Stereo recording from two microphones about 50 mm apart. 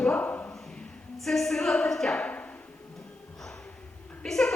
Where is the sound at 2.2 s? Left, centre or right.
Left.